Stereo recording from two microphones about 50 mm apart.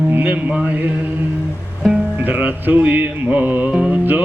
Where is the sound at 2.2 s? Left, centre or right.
Right.